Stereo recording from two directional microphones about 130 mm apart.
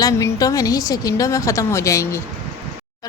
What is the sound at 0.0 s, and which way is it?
A woman's voice, 25° left (ahead or behind).